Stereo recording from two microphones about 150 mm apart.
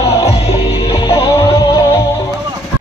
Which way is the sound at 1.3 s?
20° left (ahead or behind).